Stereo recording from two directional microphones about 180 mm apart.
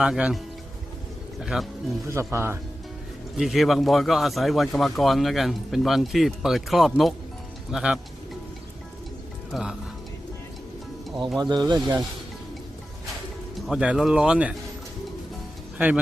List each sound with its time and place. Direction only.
0.0 s speech: 5° right (ahead or behind)
1.4 s speech: centre (ahead or behind)
2.0 s speech: 15° right (ahead or behind)
3.3 s speech: centre (ahead or behind)
9.5 s speech: centre (ahead or behind)
11.2 s speech: centre (ahead or behind)
11.4 s speech: 25° right (ahead or behind)
13.7 s speech: 5° right (ahead or behind)